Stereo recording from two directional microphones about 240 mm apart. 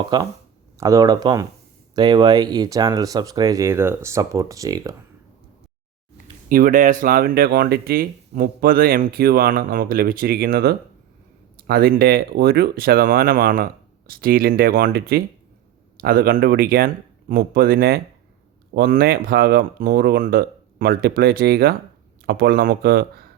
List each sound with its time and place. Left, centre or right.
0.1 s speech: centre
6.5 s speech: right